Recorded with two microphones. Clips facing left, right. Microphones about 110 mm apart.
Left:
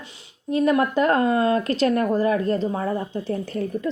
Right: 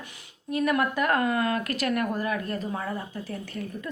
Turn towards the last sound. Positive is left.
turn(degrees=30)  # may be behind; listen again after turning